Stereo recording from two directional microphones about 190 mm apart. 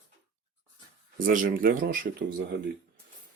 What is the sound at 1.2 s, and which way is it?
Speech, 45° right (ahead or behind).